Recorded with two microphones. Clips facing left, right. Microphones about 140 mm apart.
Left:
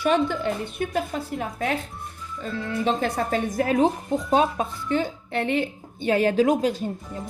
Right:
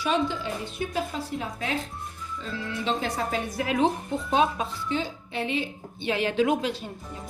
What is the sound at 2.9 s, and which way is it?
A woman's voice, 50° left (ahead or behind).